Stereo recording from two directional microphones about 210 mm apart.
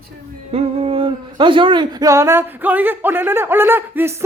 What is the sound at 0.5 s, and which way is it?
Speech, 30° right (ahead or behind).